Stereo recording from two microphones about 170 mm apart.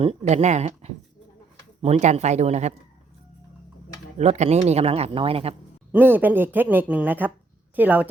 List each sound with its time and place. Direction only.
0.0 s speech: 35° right (ahead or behind)
4.2 s speech: 40° right (ahead or behind)
5.9 s speech: 10° right (ahead or behind)